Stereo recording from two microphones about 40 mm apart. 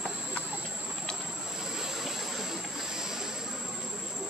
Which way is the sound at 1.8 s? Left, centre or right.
Centre.